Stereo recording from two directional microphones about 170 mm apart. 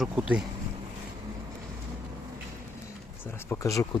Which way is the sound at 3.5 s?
20° left (ahead or behind).